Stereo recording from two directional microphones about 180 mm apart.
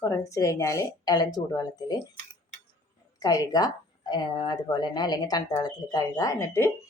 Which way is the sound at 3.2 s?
20° left (ahead or behind).